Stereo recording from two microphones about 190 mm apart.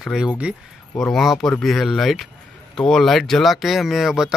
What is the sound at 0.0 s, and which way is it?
Speech, 5° right (ahead or behind).